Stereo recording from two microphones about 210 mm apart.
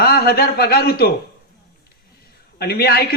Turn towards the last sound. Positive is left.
turn(degrees=50)  # may be behind; listen again after turning